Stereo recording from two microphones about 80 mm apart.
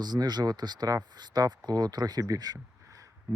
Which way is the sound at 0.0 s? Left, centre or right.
Right.